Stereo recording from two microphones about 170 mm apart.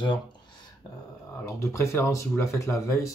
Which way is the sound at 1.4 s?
15° left (ahead or behind).